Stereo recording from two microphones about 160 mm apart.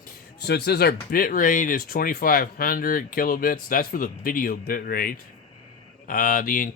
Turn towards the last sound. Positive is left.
turn(degrees=60)  # may be behind; listen again after turning